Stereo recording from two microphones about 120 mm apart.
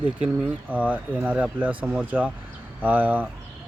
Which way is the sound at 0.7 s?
15° right (ahead or behind).